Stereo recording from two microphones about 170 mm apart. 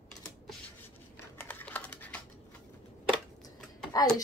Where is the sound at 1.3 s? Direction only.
10° left (ahead or behind).